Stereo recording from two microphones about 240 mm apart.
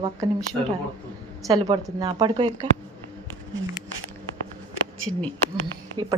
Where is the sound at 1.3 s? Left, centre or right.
Centre.